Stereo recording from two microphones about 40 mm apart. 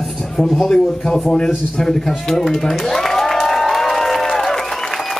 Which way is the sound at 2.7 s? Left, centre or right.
Centre.